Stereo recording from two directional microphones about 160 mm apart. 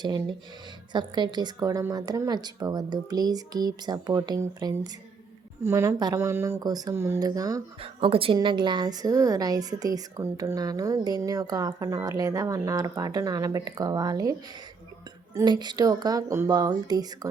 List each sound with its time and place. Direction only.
0.0 s a woman's voice: 25° right (ahead or behind)
7.8 s a woman's voice: 35° right (ahead or behind)
15.4 s a woman's voice: 25° right (ahead or behind)